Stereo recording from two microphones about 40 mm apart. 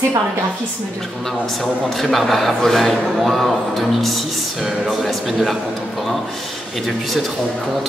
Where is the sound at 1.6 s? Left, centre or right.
Centre.